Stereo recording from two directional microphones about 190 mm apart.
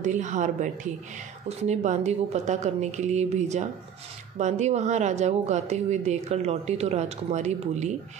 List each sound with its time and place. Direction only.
0.0 s speech: 40° right (ahead or behind)